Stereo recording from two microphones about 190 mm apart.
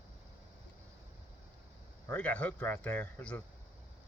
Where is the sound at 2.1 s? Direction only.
5° left (ahead or behind).